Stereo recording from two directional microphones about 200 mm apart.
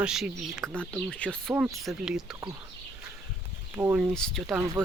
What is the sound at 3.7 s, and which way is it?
Speech, 10° right (ahead or behind).